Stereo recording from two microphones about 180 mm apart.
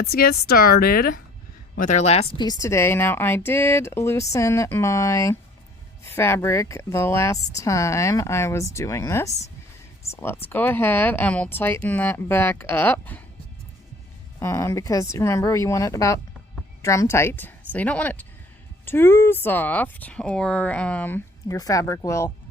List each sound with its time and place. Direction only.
0.0 s speech: 60° left (ahead or behind)
2.0 s a woman's voice: 35° left (ahead or behind); by 13.2 s 10° left (ahead or behind)
14.3 s a woman's voice: 15° left (ahead or behind)
21.4 s speech: 20° left (ahead or behind)